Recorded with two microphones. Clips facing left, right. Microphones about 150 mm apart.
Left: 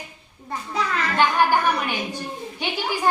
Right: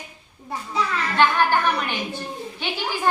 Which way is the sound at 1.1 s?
10° left (ahead or behind).